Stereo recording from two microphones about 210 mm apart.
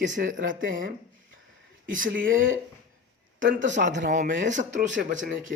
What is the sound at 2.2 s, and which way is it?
Speech, 65° right (ahead or behind).